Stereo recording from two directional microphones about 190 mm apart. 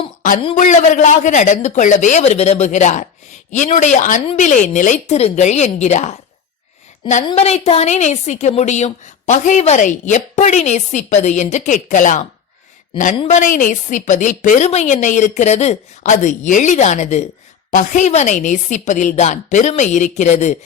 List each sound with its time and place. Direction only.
0.4 s a woman's voice: 40° left (ahead or behind)
7.3 s a woman's voice: 35° left (ahead or behind)